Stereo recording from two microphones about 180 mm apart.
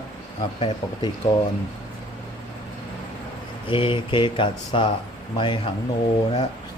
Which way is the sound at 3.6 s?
30° left (ahead or behind).